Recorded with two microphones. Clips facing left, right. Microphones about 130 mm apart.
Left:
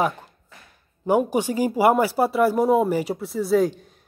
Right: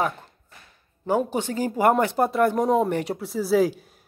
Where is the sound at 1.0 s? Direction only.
15° left (ahead or behind).